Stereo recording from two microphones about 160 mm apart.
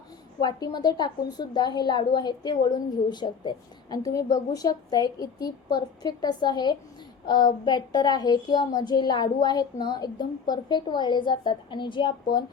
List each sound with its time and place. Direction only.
0.3 s a woman's voice: 25° left (ahead or behind)